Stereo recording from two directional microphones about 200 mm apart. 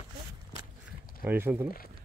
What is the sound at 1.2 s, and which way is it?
Speech, 10° right (ahead or behind).